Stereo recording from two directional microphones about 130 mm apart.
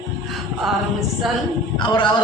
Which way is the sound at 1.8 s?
35° left (ahead or behind).